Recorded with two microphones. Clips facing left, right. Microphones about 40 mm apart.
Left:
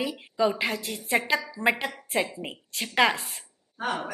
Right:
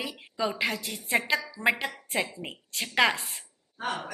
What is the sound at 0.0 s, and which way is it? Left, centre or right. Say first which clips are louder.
A woman's voice: left 5 dB; centre.